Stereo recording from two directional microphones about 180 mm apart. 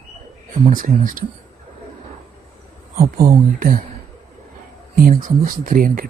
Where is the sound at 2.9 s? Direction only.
55° right (ahead or behind).